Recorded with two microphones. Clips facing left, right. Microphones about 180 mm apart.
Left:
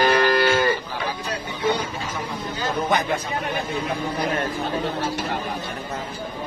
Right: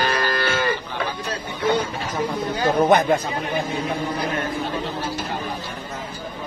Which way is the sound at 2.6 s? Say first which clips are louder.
Right 6 dB; 50° right (ahead or behind).